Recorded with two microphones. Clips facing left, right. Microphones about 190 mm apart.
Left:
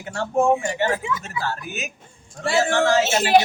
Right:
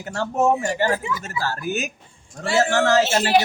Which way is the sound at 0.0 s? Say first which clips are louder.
Even; 40° right (ahead or behind).